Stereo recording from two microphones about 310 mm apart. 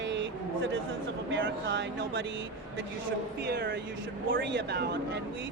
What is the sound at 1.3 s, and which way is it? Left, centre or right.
Speech, right.